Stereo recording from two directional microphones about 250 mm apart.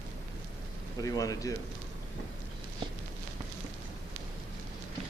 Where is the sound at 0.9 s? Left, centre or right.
Centre.